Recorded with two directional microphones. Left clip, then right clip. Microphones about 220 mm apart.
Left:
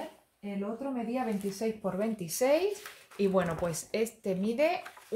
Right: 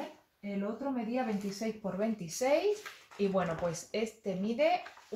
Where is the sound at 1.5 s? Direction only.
45° left (ahead or behind).